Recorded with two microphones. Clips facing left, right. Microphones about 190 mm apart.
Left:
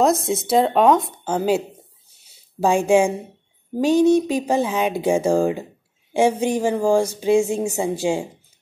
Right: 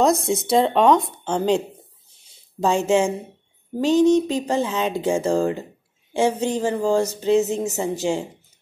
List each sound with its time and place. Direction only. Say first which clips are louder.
0.0 s speech: even; centre (ahead or behind)
2.2 s a sound: left 2 dB; 10° left (ahead or behind)
3.8 s speech: left 1 dB; 10° left (ahead or behind)